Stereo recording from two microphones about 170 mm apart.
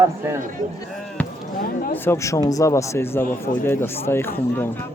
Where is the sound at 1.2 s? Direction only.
10° left (ahead or behind).